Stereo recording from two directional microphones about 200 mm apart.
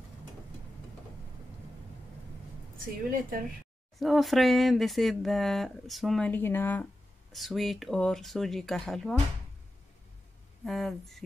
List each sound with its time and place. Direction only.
3.1 s speech: 45° right (ahead or behind)
4.0 s speech: centre (ahead or behind)
10.6 s speech: centre (ahead or behind)